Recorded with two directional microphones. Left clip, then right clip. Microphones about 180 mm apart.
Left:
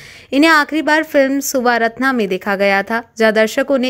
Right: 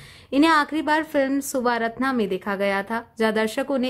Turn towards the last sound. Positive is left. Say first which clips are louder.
# left 9 dB
turn(degrees=25)  # may be behind; listen again after turning